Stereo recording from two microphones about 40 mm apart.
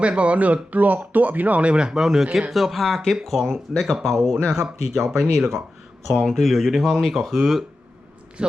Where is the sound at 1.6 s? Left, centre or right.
Right.